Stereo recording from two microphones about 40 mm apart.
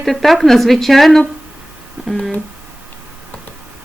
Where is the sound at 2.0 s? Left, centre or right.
Right.